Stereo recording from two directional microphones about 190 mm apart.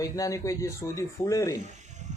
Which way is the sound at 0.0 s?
15° left (ahead or behind).